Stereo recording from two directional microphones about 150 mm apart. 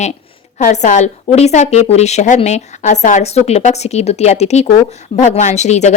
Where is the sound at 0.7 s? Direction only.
50° left (ahead or behind).